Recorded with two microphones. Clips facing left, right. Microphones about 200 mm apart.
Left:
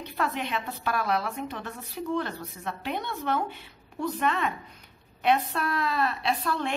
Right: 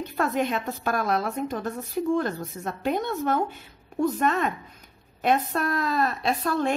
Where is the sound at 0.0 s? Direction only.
45° right (ahead or behind).